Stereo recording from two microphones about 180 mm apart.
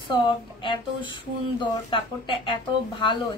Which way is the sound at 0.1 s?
25° left (ahead or behind).